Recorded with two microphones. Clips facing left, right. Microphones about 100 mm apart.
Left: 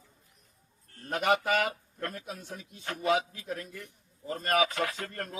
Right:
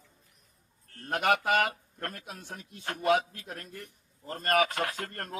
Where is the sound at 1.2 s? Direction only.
60° right (ahead or behind).